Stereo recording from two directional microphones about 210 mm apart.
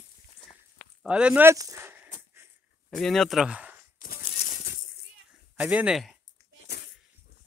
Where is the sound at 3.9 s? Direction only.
40° left (ahead or behind).